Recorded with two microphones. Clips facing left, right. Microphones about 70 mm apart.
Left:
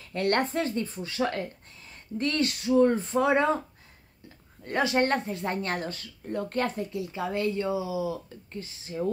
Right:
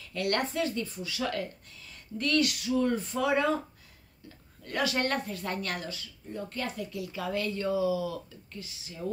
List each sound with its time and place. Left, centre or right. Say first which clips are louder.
0.1 s speech: left 4 dB; left
4.6 s speech: left 5 dB; left
5.9 s speech: left 5 dB; left
6.8 s speech: left 4 dB; left
8.5 s speech: left 8 dB; left